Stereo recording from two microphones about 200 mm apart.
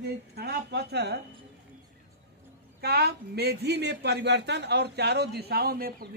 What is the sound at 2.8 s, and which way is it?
A man's voice, 55° right (ahead or behind).